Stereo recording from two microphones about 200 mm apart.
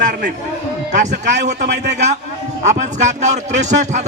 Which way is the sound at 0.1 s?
40° right (ahead or behind).